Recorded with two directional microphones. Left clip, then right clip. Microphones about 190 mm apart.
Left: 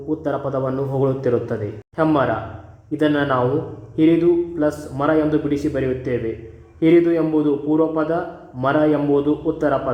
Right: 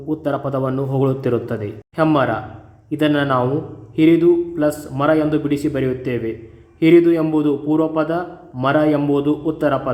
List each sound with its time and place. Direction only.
0.1 s a man's voice: 20° right (ahead or behind)